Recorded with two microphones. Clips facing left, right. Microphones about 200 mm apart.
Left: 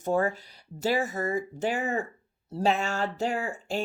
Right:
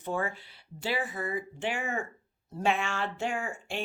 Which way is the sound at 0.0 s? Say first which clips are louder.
Left 7 dB; 40° left (ahead or behind).